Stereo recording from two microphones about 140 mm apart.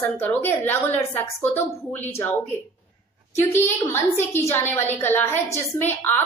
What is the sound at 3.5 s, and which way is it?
A woman's voice, 15° left (ahead or behind).